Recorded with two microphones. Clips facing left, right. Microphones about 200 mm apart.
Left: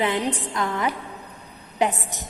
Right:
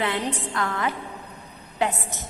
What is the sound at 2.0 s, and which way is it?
Speech, 15° left (ahead or behind).